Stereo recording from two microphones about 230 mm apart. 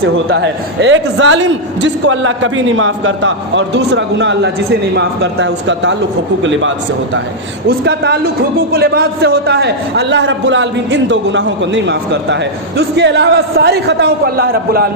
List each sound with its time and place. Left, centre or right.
0.0 s a man's voice: right
7.7 s a man's voice: right